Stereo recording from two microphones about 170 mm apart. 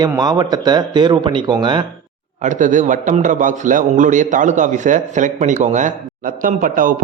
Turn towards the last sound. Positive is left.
turn(degrees=-50)  # may be behind; listen again after turning